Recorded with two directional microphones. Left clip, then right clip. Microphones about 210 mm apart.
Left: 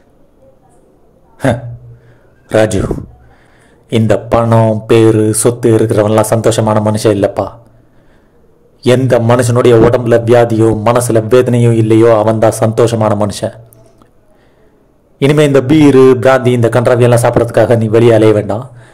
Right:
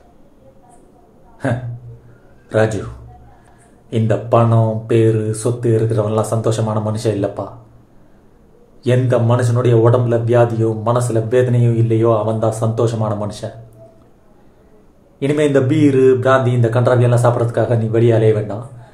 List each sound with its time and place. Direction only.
2.5 s a man's voice: 40° left (ahead or behind)
3.9 s a man's voice: 40° left (ahead or behind)
8.8 s a man's voice: 40° left (ahead or behind)
15.1 s a man's voice: 40° left (ahead or behind)